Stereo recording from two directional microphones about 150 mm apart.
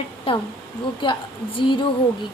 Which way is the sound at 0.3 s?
40° left (ahead or behind).